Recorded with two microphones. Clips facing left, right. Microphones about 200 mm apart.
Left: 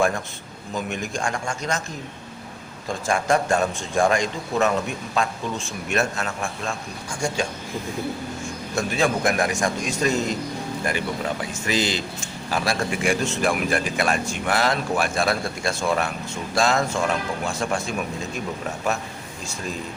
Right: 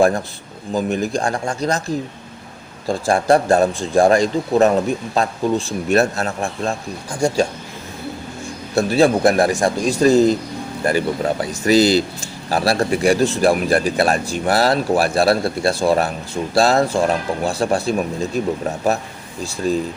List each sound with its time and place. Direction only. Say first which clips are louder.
0.7 s speech: right 9 dB; 35° right (ahead or behind)
2.8 s speech: right 7 dB; 35° right (ahead or behind)
8.7 s speech: right 8 dB; 35° right (ahead or behind)